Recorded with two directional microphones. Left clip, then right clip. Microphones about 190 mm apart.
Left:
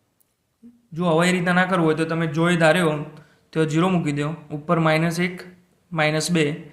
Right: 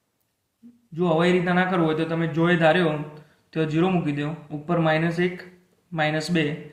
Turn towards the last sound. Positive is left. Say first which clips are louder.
# left 3 dB
turn(degrees=40)  # may be behind; listen again after turning